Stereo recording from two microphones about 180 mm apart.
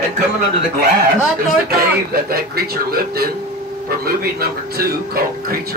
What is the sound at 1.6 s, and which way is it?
A man's voice, 55° right (ahead or behind).